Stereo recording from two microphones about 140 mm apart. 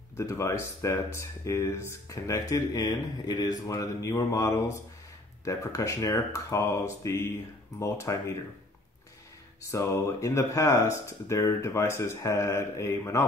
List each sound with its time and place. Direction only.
0.1 s speech: 20° left (ahead or behind)
9.7 s speech: 20° left (ahead or behind)